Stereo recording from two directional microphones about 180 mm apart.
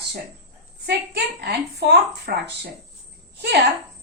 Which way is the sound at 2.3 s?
60° right (ahead or behind).